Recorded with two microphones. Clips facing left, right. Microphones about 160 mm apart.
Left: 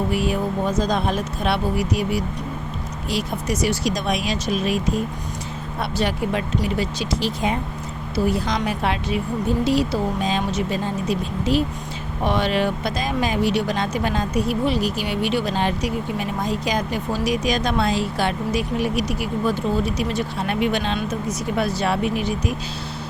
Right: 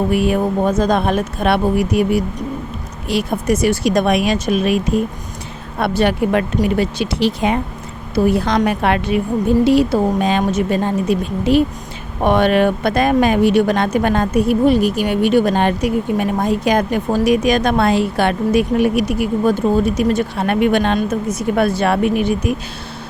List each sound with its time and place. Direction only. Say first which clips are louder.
0.1 s speech: right 6 dB; 60° right (ahead or behind)
8.1 s speech: right 7 dB; 60° right (ahead or behind)